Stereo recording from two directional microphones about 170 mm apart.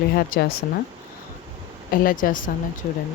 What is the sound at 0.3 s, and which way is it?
Speech, 55° left (ahead or behind).